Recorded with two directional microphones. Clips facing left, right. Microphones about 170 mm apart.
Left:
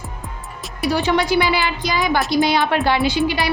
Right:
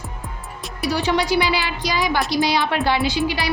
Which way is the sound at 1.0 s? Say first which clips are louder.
Left 1 dB; 55° left (ahead or behind).